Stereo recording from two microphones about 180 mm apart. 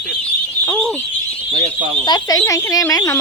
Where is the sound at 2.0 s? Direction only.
20° left (ahead or behind).